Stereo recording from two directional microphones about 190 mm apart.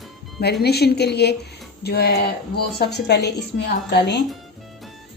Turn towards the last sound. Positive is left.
turn(degrees=60)  # may be behind; listen again after turning